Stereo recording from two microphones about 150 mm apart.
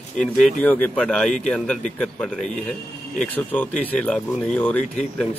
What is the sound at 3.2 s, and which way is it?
Speech, 10° left (ahead or behind).